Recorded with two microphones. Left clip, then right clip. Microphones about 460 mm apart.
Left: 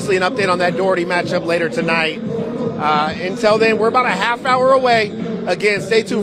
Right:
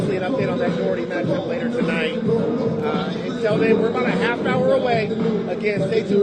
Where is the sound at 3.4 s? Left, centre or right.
Left.